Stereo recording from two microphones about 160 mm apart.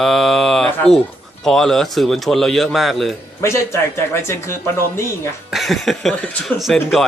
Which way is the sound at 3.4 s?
15° left (ahead or behind).